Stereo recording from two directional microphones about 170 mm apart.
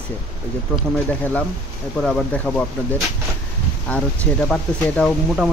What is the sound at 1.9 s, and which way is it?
Speech, centre (ahead or behind).